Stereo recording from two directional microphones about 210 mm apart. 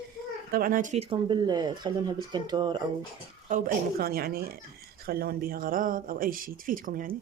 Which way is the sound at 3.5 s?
40° right (ahead or behind).